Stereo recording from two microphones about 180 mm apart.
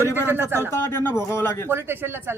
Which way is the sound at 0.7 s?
15° left (ahead or behind).